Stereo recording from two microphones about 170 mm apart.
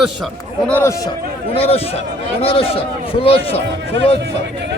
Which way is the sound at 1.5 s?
35° left (ahead or behind).